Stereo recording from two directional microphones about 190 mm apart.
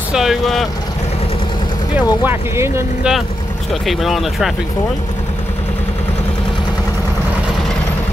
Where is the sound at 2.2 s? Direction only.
15° right (ahead or behind).